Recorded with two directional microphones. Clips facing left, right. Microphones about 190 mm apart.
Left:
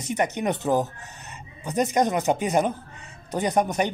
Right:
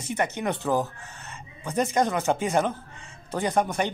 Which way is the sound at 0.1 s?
15° left (ahead or behind).